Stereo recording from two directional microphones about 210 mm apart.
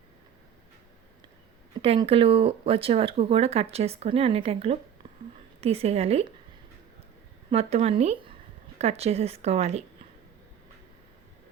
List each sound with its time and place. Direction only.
1.8 s speech: 25° right (ahead or behind)
7.5 s speech: 30° right (ahead or behind)